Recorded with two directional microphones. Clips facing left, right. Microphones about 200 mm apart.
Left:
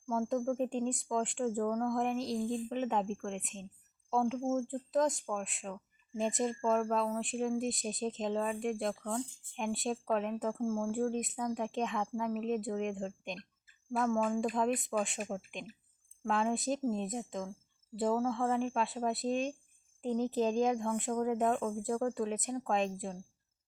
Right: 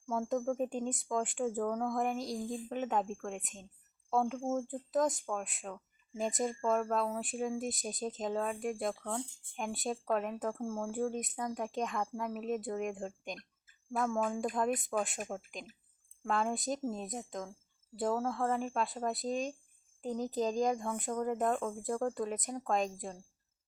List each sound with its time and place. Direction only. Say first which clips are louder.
0.1 s speech: left 1 dB; centre (ahead or behind)